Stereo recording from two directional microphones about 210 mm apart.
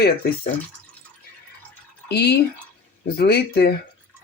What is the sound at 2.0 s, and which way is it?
Speech, 50° left (ahead or behind).